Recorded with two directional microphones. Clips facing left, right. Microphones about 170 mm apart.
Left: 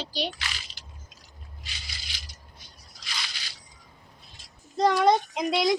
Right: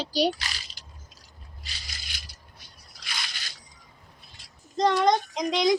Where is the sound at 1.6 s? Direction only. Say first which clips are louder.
Even; 50° right (ahead or behind).